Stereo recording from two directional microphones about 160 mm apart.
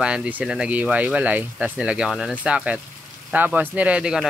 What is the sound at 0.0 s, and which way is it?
Speech, 5° right (ahead or behind).